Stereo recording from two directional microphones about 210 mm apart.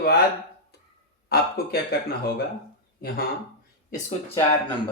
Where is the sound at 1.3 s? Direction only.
45° left (ahead or behind).